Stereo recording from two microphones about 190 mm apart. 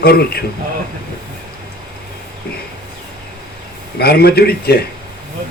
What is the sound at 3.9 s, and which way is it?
Speech, 55° left (ahead or behind).